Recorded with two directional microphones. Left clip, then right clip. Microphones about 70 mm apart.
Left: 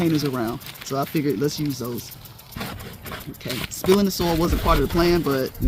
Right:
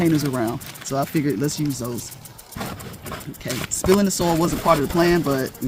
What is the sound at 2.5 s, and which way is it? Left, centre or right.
Clip-clop, centre.